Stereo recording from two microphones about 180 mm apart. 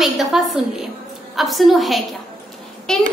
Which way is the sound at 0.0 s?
Centre (ahead or behind).